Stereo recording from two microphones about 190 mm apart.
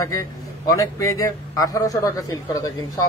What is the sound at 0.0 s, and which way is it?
A man's voice, 15° left (ahead or behind).